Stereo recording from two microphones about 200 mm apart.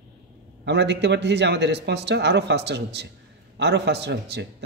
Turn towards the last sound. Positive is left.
turn(degrees=-60)  # may be behind; listen again after turning